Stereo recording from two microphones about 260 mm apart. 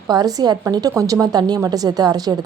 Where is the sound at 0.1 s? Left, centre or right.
Centre.